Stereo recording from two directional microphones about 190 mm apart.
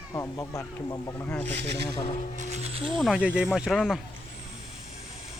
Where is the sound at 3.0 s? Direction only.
5° right (ahead or behind).